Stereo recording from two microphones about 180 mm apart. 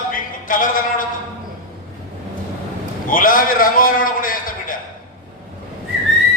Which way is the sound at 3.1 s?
50° left (ahead or behind).